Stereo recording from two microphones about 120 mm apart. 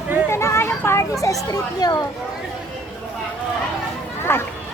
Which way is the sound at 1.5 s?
30° left (ahead or behind).